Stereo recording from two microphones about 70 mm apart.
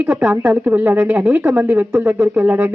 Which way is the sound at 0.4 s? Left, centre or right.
Right.